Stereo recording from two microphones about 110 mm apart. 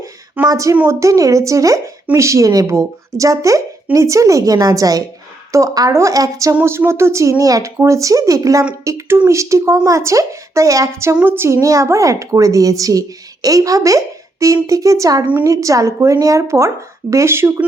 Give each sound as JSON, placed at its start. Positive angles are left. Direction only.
{"t": 0.4, "sound": "a woman's voice", "side_deg": -30}